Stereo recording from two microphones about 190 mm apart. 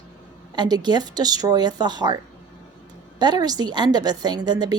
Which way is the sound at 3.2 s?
20° right (ahead or behind).